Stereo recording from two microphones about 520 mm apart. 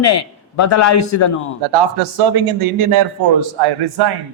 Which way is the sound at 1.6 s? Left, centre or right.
Right.